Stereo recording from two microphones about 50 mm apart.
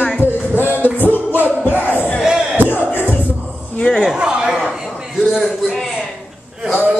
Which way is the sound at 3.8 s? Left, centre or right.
Centre.